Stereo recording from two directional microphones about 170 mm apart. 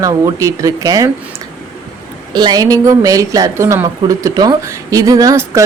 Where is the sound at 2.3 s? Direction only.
25° right (ahead or behind).